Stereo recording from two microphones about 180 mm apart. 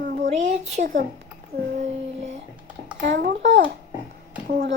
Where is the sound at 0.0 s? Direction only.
70° right (ahead or behind).